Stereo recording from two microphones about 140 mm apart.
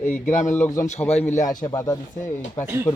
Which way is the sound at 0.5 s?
15° left (ahead or behind).